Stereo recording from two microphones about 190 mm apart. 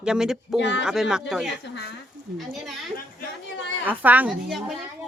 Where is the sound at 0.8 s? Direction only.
5° right (ahead or behind).